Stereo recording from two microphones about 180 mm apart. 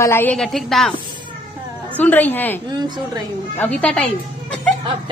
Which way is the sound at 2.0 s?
10° left (ahead or behind).